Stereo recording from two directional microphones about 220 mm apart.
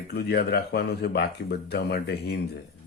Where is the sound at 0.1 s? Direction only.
45° left (ahead or behind).